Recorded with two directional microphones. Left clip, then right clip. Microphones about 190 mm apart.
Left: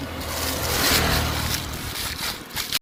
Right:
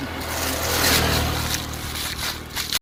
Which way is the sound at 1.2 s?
45° right (ahead or behind).